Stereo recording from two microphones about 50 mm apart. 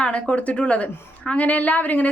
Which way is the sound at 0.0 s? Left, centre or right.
Left.